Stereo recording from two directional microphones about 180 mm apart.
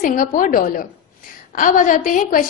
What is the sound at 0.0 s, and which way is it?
A woman's voice, 50° left (ahead or behind).